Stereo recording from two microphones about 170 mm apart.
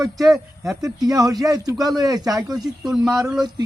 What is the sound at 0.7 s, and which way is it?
Speech, 20° right (ahead or behind).